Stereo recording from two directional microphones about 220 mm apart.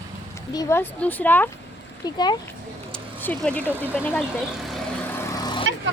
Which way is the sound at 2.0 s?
20° left (ahead or behind).